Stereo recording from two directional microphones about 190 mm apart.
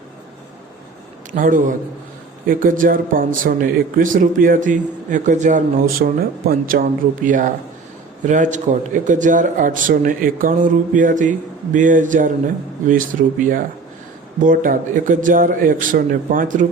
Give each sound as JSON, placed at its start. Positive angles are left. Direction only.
{"t": 1.3, "sound": "speech", "side_deg": -45}